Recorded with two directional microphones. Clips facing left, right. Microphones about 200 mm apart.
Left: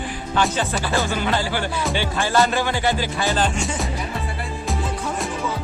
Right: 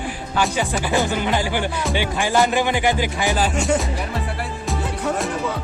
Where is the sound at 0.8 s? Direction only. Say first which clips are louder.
Right 3 dB; 15° right (ahead or behind).